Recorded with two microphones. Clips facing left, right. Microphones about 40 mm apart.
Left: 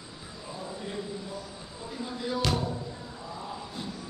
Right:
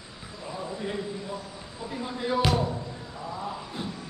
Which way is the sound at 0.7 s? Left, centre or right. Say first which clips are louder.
Right 3 dB; right.